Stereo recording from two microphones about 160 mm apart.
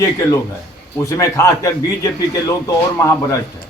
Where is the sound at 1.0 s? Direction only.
20° left (ahead or behind).